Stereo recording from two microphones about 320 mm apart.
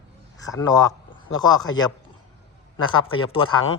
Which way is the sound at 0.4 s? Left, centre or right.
Centre.